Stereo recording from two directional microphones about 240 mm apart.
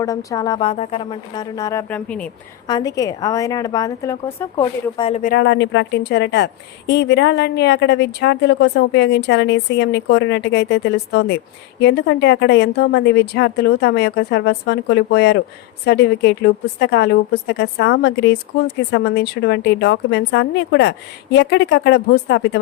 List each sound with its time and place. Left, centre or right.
0.0 s a woman's voice: centre
2.6 s a woman's voice: centre
5.3 s a woman's voice: left